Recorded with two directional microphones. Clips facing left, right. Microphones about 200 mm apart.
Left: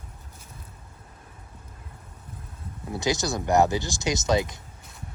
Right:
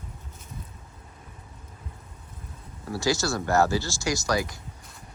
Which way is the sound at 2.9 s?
20° left (ahead or behind).